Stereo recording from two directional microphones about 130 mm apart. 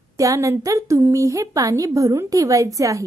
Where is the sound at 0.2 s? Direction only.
25° right (ahead or behind).